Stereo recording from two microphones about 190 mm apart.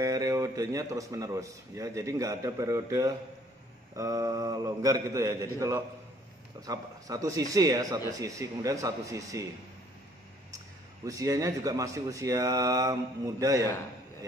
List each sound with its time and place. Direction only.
0.0 s a man's voice: 15° right (ahead or behind)
11.1 s a man's voice: 20° right (ahead or behind)